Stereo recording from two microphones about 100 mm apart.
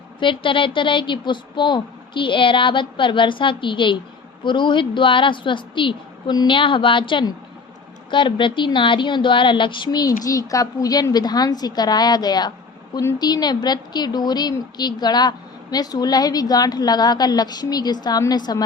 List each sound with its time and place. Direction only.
0.2 s a woman's voice: 55° left (ahead or behind)
6.6 s a woman's voice: 60° left (ahead or behind); by 18.6 s 40° left (ahead or behind)